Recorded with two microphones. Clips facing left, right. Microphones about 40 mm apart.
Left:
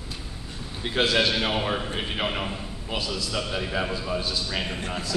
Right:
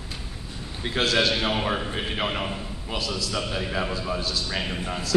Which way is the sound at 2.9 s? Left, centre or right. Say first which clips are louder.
Even; centre.